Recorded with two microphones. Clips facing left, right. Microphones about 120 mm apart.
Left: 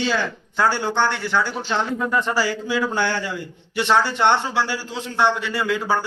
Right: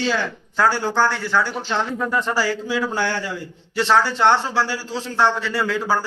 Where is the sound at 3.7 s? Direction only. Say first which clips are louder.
Right 1 dB; 20° left (ahead or behind).